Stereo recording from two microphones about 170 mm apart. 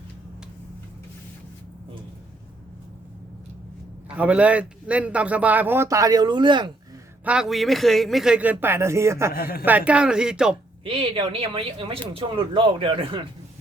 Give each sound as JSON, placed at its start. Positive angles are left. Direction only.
{"t": 4.1, "sound": "a man's voice", "side_deg": -5}
{"t": 7.3, "sound": "speech", "side_deg": -5}
{"t": 9.3, "sound": "speech", "side_deg": 60}
{"t": 9.6, "sound": "speech", "side_deg": -10}
{"t": 10.8, "sound": "speech", "side_deg": -35}